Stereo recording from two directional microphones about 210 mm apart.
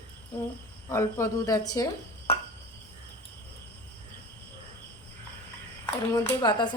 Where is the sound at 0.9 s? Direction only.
15° left (ahead or behind).